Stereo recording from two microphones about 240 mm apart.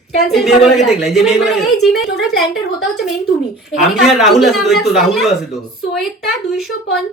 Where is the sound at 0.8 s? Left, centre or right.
Left.